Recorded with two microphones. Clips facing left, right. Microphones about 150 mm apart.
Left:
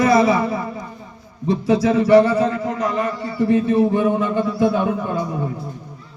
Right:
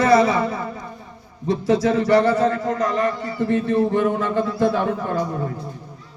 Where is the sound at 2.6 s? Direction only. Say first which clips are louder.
Right 1 dB; 20° left (ahead or behind).